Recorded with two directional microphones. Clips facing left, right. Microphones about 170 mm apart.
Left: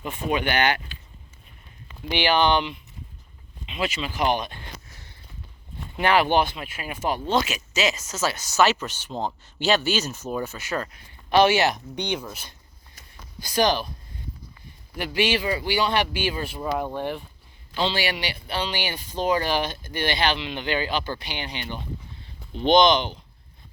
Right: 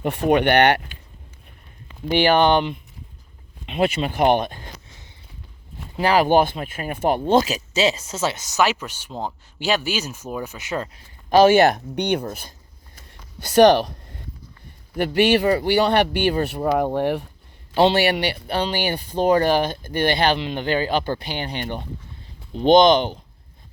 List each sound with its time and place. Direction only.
0.0 s speech: 65° right (ahead or behind)
2.0 s speech: 45° right (ahead or behind)
6.0 s speech: 35° right (ahead or behind); by 7.3 s 55° right (ahead or behind)
7.3 s speech: 35° right (ahead or behind); by 10.8 s 20° right (ahead or behind)
10.9 s speech: 40° right (ahead or behind)
13.4 s speech: 65° right (ahead or behind)
14.9 s speech: 55° right (ahead or behind)